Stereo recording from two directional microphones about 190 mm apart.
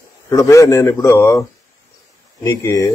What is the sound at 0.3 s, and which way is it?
A man's voice, 15° left (ahead or behind).